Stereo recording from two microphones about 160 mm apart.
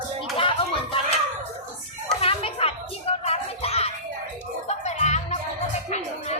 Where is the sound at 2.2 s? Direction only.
40° left (ahead or behind).